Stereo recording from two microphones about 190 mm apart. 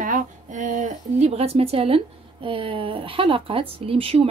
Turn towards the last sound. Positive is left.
turn(degrees=-30)  # may be behind; listen again after turning